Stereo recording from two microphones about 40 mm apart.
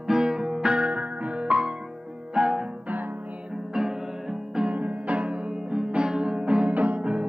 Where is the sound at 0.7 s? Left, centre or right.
Right.